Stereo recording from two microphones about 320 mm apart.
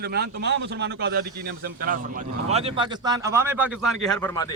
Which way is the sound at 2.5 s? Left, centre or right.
Centre.